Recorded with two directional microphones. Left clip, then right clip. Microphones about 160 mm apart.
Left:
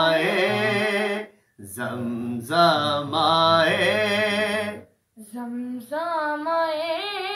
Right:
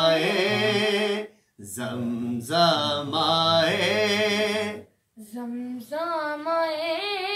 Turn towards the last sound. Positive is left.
turn(degrees=-20)  # may be behind; listen again after turning